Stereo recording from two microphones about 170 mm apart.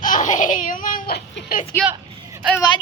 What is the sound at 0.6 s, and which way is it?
Speech, 50° left (ahead or behind).